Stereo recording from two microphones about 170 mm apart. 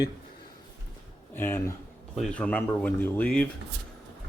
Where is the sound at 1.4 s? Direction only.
15° left (ahead or behind).